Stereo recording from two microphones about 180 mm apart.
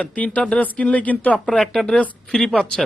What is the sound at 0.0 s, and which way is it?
Speech, 5° left (ahead or behind).